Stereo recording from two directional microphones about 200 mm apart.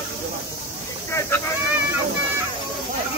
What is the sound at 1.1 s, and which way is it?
Speech, 10° left (ahead or behind).